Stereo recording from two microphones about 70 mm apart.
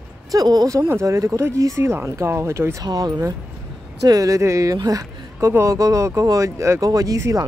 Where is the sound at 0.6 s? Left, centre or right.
Right.